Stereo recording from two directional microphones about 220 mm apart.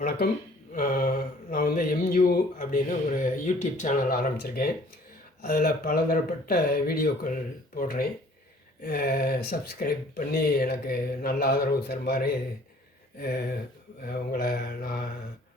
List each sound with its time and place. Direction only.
0.0 s speech: 45° left (ahead or behind)